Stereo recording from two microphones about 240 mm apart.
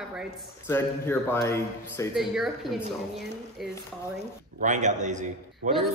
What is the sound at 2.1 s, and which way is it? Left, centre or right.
A woman's voice, centre.